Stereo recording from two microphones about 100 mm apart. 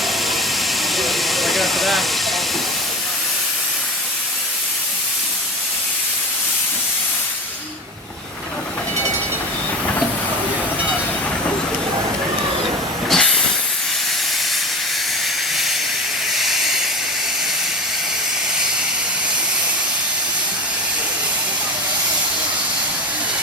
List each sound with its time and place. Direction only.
0.9 s steam: centre (ahead or behind)
13.1 s train: 5° left (ahead or behind)
16.4 s hiss: centre (ahead or behind)